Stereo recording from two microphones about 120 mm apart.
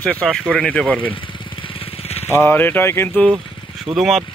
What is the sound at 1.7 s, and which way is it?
Vehicle, 60° left (ahead or behind).